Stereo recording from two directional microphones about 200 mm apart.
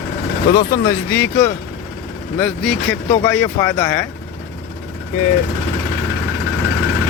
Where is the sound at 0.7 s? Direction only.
15° left (ahead or behind).